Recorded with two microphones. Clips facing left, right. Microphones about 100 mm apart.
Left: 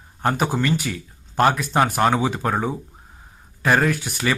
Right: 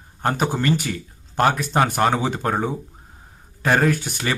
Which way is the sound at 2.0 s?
35° right (ahead or behind).